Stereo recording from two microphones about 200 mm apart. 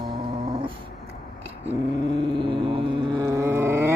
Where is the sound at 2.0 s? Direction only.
20° right (ahead or behind).